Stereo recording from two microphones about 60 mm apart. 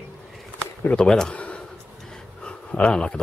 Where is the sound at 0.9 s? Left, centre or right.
Centre.